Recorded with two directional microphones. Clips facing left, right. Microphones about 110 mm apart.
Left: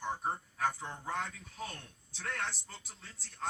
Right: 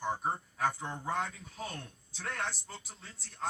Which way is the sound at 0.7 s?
15° right (ahead or behind).